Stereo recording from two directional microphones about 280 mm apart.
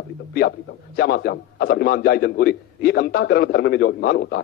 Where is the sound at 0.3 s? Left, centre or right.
Left.